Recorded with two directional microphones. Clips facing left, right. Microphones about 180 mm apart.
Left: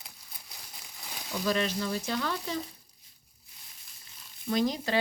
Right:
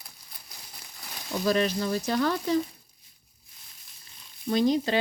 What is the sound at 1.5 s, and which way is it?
Speech, 40° right (ahead or behind).